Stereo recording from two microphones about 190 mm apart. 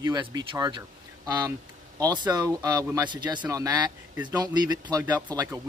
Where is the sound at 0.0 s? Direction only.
20° right (ahead or behind).